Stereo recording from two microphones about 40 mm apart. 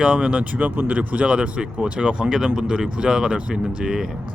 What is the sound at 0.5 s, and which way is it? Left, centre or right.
Speech, right.